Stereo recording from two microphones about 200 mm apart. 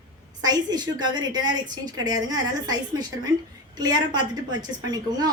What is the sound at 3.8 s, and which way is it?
A woman's voice, 20° right (ahead or behind).